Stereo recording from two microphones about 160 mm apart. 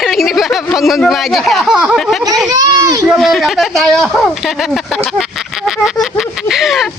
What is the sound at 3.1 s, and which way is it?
Speech, centre (ahead or behind).